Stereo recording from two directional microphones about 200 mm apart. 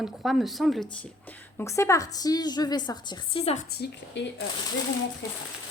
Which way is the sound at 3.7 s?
55° left (ahead or behind).